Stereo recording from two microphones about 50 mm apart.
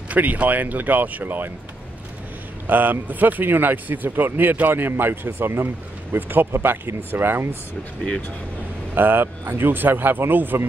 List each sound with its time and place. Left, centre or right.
0.1 s speech: right
2.6 s speech: right
6.1 s speech: right
6.5 s speech: right
8.9 s speech: right